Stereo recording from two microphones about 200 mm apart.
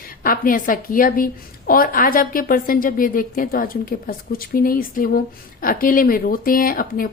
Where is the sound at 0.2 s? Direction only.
45° left (ahead or behind).